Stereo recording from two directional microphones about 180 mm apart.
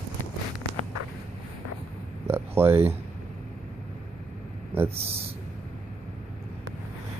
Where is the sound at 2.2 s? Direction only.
10° right (ahead or behind).